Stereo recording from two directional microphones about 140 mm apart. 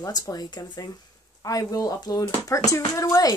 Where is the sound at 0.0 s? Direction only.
25° left (ahead or behind).